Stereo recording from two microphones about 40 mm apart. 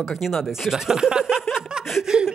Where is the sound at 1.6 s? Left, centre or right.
Right.